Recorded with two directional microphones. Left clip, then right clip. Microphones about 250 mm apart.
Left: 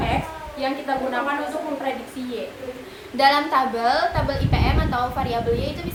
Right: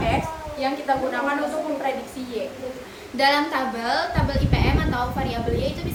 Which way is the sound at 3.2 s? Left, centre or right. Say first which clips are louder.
Left 3 dB; centre.